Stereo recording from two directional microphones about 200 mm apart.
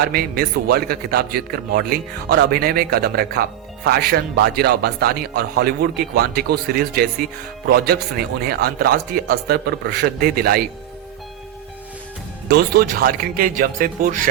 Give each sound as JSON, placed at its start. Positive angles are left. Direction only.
{"t": 0.1, "sound": "a man's voice", "side_deg": -50}
{"t": 12.5, "sound": "a man's voice", "side_deg": -50}